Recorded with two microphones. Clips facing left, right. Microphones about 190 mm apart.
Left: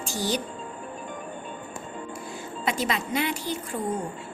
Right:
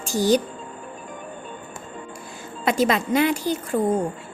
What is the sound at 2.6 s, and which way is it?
Speech, 45° right (ahead or behind).